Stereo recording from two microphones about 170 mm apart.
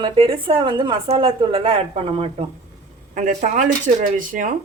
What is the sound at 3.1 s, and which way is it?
Speech, 45° right (ahead or behind).